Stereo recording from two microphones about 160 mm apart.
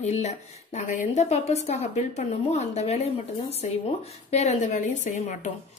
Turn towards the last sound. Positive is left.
turn(degrees=50)  # may be behind; listen again after turning